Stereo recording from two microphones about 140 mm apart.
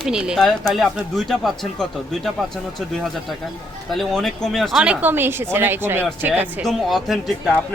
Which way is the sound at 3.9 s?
5° left (ahead or behind).